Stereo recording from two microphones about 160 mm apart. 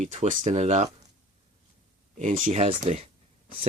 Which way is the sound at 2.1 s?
50° right (ahead or behind).